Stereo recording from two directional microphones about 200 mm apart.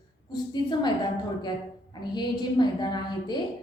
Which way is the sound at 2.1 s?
20° left (ahead or behind).